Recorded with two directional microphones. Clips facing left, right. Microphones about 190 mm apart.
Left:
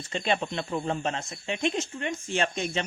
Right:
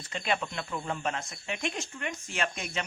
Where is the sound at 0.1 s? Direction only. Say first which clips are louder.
Left 4 dB; 25° left (ahead or behind).